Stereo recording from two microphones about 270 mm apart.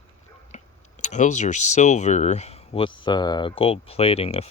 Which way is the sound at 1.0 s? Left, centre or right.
Left.